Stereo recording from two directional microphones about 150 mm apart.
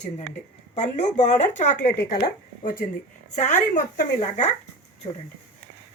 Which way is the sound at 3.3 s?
55° left (ahead or behind).